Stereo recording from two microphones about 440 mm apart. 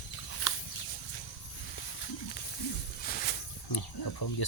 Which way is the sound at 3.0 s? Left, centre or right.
Centre.